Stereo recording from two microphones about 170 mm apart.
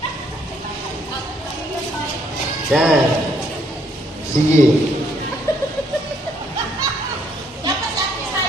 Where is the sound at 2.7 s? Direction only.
5° right (ahead or behind).